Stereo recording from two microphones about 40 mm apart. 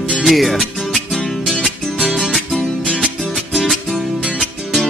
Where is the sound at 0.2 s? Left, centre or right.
Centre.